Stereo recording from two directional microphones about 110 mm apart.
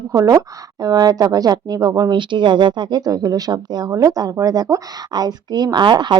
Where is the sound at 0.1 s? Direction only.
30° right (ahead or behind).